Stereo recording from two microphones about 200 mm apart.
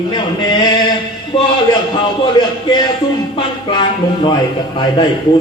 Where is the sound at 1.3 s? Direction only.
20° left (ahead or behind).